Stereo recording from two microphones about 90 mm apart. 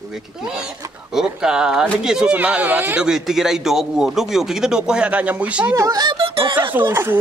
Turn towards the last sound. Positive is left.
turn(degrees=-25)  # may be behind; listen again after turning